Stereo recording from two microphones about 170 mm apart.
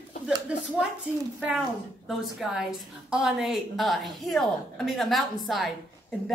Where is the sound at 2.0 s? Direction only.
5° right (ahead or behind).